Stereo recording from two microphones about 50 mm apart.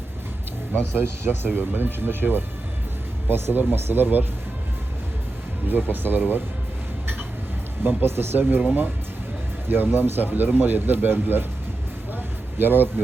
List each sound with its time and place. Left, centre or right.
0.9 s speech: right
5.6 s speech: right
7.9 s speech: right
9.6 s speech: right
12.1 s a sound: right